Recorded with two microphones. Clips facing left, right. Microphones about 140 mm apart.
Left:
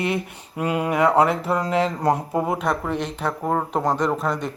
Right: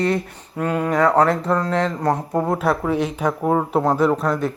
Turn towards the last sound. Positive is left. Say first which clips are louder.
# right 4 dB
turn(degrees=0)  # may be behind; listen again after turning